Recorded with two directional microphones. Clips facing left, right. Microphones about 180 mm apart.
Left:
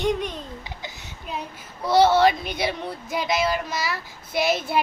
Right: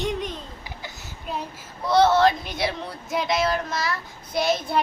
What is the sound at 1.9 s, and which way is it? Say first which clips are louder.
Speech: left 1 dB; 5° left (ahead or behind).